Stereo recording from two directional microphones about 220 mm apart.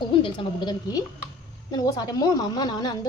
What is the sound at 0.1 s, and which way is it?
A woman's voice, 20° left (ahead or behind).